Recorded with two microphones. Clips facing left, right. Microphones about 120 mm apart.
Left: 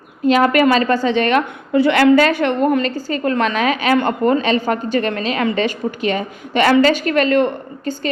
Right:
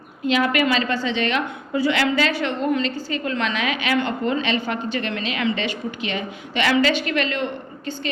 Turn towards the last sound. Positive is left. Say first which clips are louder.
# left 7 dB
turn(degrees=45)  # may be behind; listen again after turning